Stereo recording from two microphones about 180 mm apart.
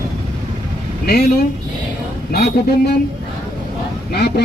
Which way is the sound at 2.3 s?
65° left (ahead or behind).